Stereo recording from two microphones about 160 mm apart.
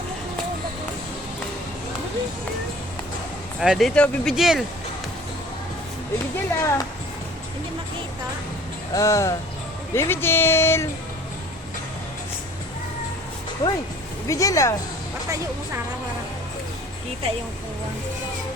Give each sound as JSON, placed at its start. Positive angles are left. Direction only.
{"t": 3.6, "sound": "speech", "side_deg": 0}
{"t": 6.6, "sound": "speech", "side_deg": 20}
{"t": 8.9, "sound": "speech", "side_deg": 20}
{"t": 13.6, "sound": "speech", "side_deg": 25}